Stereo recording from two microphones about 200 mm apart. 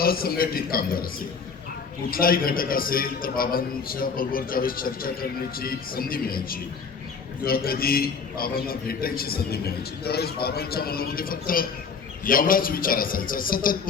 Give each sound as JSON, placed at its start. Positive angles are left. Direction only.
{"t": 0.0, "sound": "a man's voice", "side_deg": 50}
{"t": 2.0, "sound": "a man's voice", "side_deg": 45}